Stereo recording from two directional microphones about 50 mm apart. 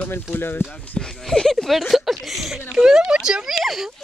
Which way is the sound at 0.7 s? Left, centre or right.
Centre.